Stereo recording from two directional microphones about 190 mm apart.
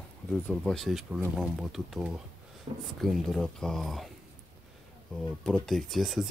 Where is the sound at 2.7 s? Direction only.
25° right (ahead or behind).